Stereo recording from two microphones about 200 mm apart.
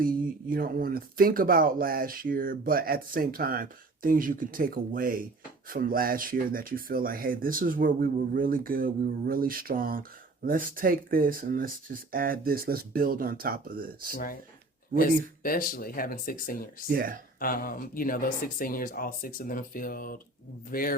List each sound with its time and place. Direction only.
0.0 s speech: 45° right (ahead or behind)
14.1 s speech: 45° left (ahead or behind)
16.9 s speech: 45° right (ahead or behind)
17.4 s speech: 45° left (ahead or behind)